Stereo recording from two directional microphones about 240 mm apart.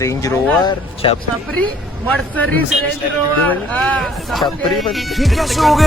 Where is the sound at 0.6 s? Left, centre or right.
Left.